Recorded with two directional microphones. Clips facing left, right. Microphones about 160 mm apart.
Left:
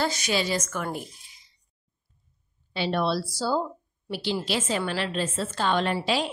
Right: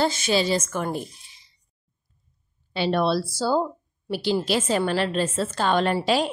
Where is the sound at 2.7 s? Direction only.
50° right (ahead or behind).